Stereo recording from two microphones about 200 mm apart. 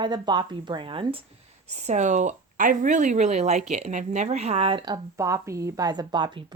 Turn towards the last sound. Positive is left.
turn(degrees=-25)  # may be behind; listen again after turning